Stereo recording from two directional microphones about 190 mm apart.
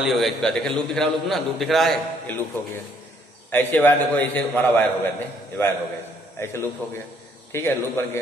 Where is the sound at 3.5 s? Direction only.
10° left (ahead or behind).